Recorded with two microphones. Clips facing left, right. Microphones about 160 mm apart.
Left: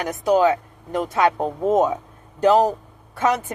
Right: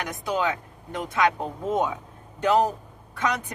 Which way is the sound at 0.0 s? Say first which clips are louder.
Left 9 dB; 40° left (ahead or behind).